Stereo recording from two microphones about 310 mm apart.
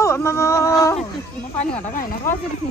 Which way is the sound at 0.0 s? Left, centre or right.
Centre.